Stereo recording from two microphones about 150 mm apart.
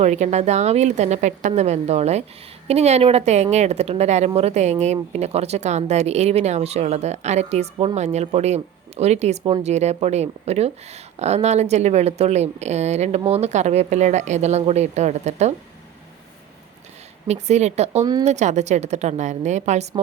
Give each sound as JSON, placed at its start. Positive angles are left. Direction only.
{"t": 0.0, "sound": "speech", "side_deg": -50}
{"t": 17.2, "sound": "speech", "side_deg": -50}
{"t": 18.0, "sound": "speech", "side_deg": -25}
{"t": 18.3, "sound": "speech", "side_deg": -50}